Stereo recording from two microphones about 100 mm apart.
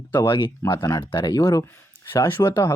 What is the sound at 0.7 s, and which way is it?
Speech, 35° left (ahead or behind).